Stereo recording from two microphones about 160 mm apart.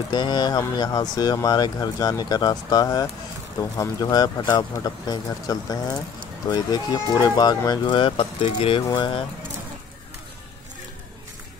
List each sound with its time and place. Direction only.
0.1 s speech: 25° left (ahead or behind)